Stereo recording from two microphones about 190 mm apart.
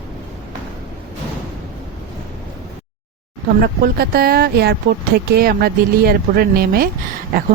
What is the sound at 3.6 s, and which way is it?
Speech, 55° right (ahead or behind).